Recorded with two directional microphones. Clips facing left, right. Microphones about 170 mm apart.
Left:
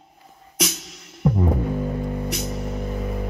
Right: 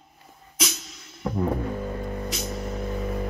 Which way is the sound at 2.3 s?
20° left (ahead or behind).